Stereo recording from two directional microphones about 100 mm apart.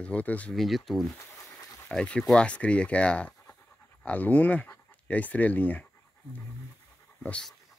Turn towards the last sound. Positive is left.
turn(degrees=10)  # may be behind; listen again after turning